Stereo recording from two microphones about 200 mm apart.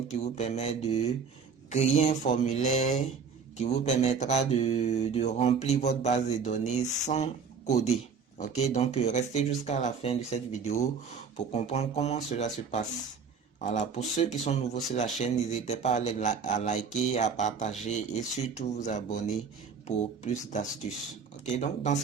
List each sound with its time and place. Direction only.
0.1 s speech: 35° left (ahead or behind)
20.2 s speech: 40° left (ahead or behind)